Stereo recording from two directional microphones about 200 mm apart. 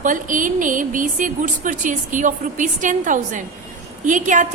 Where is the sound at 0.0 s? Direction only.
40° right (ahead or behind).